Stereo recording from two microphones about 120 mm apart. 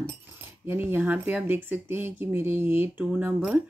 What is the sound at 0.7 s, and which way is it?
Speech, 20° right (ahead or behind).